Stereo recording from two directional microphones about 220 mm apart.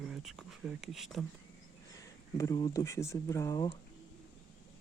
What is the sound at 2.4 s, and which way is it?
Speech, 15° left (ahead or behind).